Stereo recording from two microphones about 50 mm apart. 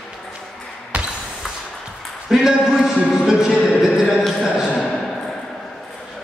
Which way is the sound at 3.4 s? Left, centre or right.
Centre.